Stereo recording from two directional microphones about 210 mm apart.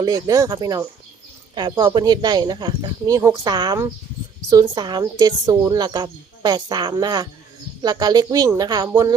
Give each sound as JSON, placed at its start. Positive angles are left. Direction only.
{"t": 0.0, "sound": "a woman's voice", "side_deg": -15}